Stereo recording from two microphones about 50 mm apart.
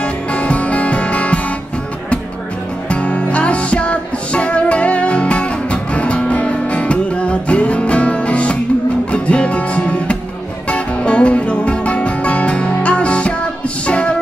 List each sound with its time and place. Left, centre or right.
0.0 s music: left
2.9 s music: left